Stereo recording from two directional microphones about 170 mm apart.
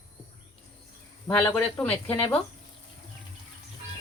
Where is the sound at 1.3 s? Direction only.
10° left (ahead or behind).